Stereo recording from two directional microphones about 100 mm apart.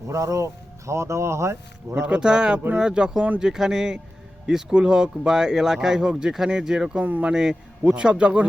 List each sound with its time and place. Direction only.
0.1 s speech: 30° right (ahead or behind)
2.0 s speech: 10° right (ahead or behind)